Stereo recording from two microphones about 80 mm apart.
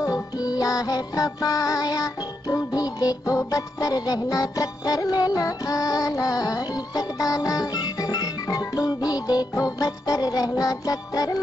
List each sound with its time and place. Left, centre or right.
0.0 s music: left